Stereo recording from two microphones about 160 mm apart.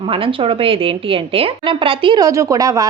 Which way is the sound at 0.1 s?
35° right (ahead or behind).